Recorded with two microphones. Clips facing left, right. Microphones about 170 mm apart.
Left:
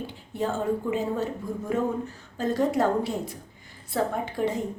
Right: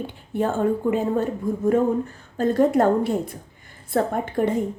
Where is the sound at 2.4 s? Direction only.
55° right (ahead or behind).